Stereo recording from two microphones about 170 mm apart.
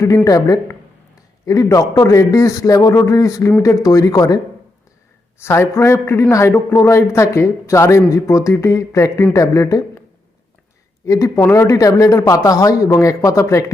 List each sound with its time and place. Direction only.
0.3 s a man's voice: 20° left (ahead or behind)
5.4 s a man's voice: 15° left (ahead or behind)
11.0 s a man's voice: 20° left (ahead or behind)